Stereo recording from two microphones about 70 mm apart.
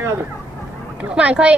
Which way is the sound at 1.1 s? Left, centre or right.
Centre.